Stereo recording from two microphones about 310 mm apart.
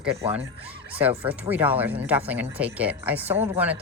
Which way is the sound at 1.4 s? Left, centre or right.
Centre.